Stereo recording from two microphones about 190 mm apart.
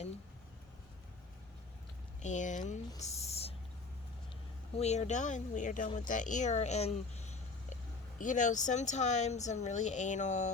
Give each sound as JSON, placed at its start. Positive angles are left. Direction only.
{"t": 2.2, "sound": "speech", "side_deg": 40}
{"t": 3.0, "sound": "a sound", "side_deg": 35}
{"t": 4.8, "sound": "speech", "side_deg": 35}